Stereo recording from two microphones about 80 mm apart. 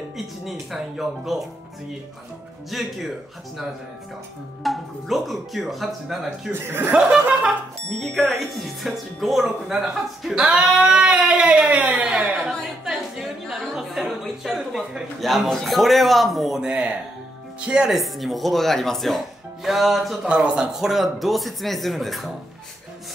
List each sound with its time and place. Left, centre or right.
0.5 s speech: centre
2.7 s speech: centre
4.6 s speech: centre
6.5 s speech: right
7.0 s speech: centre
8.0 s speech: centre
20.2 s speech: centre